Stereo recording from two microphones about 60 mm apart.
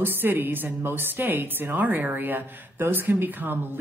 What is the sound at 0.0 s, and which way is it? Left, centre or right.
A woman's voice, right.